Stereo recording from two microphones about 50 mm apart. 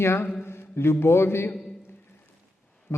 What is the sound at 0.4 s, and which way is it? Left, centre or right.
Mantra, left.